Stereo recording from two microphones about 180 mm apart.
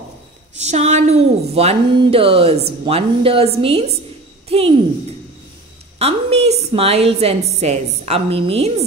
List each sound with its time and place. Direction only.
0.6 s a woman's voice: 40° right (ahead or behind)
5.9 s a woman's voice: 35° right (ahead or behind)